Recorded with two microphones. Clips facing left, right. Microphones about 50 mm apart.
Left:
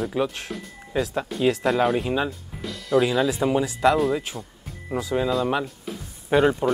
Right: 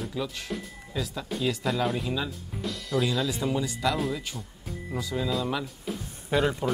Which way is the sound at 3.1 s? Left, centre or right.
Centre.